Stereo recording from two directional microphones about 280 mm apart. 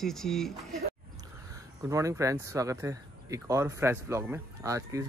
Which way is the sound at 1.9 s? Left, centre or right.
Centre.